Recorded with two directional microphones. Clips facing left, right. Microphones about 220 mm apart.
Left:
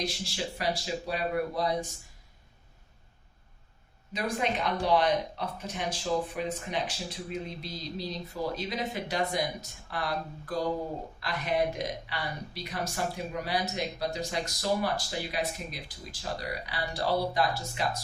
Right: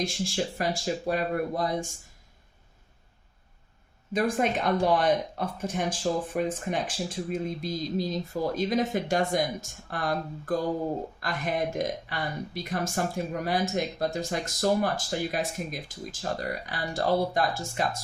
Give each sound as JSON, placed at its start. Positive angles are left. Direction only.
{"t": 0.0, "sound": "speech", "side_deg": -50}
{"t": 4.1, "sound": "speech", "side_deg": -50}